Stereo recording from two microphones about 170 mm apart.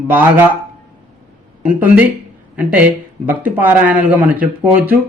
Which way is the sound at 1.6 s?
10° right (ahead or behind).